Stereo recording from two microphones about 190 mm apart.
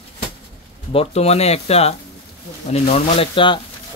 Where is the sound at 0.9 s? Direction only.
35° left (ahead or behind).